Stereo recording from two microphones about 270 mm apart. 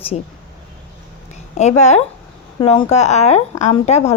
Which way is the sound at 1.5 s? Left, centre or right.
Left.